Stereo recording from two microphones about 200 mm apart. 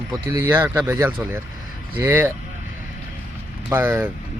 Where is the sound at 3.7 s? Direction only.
10° right (ahead or behind).